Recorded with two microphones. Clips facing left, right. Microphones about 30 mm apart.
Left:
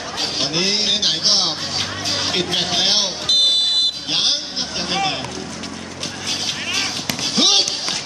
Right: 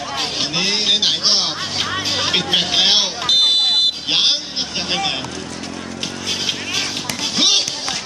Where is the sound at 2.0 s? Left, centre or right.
Centre.